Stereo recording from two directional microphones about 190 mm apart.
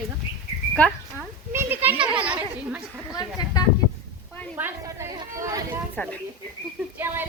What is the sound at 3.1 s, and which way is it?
Speech, 20° left (ahead or behind).